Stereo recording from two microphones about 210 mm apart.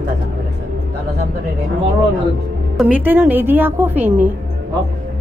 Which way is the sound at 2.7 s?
5° right (ahead or behind).